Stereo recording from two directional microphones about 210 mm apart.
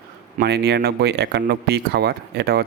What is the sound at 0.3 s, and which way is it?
Speech, 50° right (ahead or behind).